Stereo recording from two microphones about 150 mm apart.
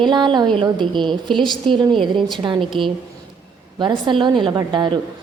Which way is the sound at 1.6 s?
35° right (ahead or behind).